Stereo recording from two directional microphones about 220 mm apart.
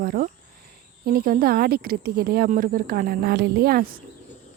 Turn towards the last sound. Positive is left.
turn(degrees=-40)  # may be behind; listen again after turning